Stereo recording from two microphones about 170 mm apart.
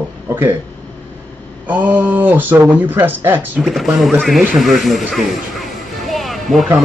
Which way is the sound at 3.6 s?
Centre (ahead or behind).